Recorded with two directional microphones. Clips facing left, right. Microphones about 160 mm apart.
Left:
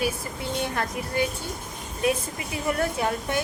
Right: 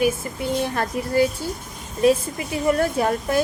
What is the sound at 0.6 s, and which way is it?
A woman's voice, 30° right (ahead or behind).